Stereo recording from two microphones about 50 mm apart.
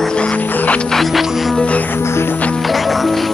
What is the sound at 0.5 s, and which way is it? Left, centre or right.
Music, left.